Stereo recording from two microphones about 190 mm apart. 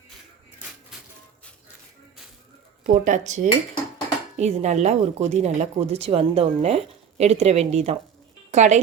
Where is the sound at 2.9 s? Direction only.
40° right (ahead or behind).